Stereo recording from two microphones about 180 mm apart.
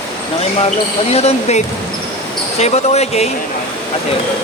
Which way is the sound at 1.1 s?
35° left (ahead or behind).